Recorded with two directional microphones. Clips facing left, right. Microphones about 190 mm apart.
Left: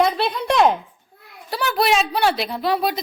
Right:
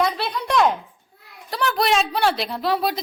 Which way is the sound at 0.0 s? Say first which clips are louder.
Left 3 dB; 25° left (ahead or behind).